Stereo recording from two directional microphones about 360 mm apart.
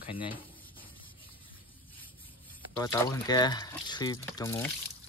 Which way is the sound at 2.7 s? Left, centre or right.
Centre.